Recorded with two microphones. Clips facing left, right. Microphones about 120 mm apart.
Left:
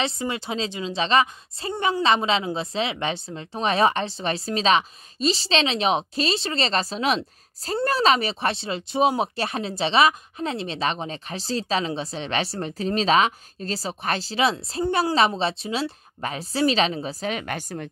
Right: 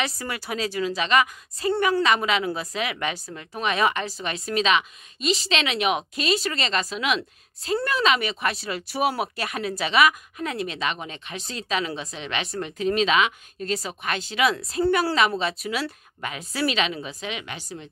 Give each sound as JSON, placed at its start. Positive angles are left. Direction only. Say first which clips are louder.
{"t": 0.0, "sound": "a woman's voice", "louder": "left 3 dB", "side_deg": 25}